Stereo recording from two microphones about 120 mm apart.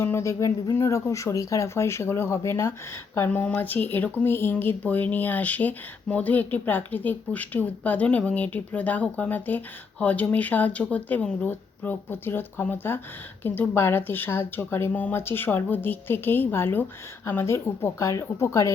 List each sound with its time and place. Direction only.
0.0 s speech: 20° left (ahead or behind)